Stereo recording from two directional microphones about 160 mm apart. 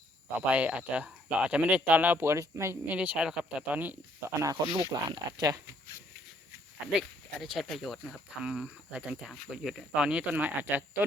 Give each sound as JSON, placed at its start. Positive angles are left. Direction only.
{"t": 0.5, "sound": "speech", "side_deg": -10}
{"t": 4.6, "sound": "speech", "side_deg": -30}
{"t": 7.3, "sound": "speech", "side_deg": 0}